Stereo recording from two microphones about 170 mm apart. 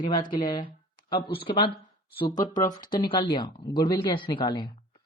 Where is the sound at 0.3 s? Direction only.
20° left (ahead or behind).